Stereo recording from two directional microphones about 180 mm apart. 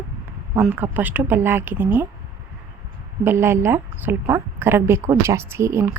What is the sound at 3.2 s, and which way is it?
A woman's voice, 15° right (ahead or behind).